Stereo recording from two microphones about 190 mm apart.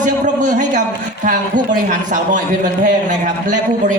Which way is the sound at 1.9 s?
40° right (ahead or behind).